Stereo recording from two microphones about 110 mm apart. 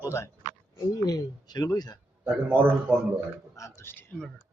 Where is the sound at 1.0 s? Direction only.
35° left (ahead or behind).